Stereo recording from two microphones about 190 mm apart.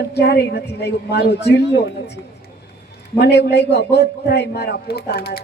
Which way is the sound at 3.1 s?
60° left (ahead or behind).